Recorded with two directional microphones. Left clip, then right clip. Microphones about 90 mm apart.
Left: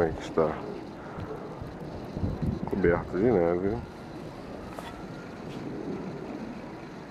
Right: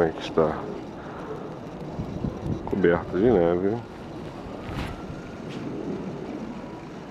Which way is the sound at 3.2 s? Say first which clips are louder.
Right 5 dB; 10° right (ahead or behind).